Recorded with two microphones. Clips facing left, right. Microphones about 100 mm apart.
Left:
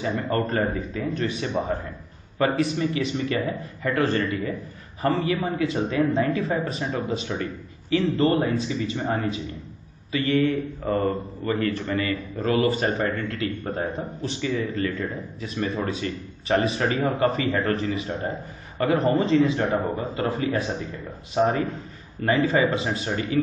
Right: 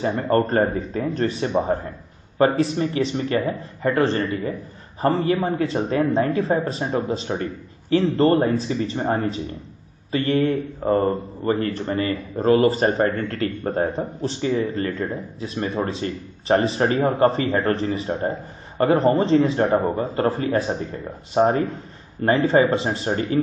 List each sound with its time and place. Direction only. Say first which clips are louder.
0.3 s a man's voice: right 7 dB; 35° right (ahead or behind)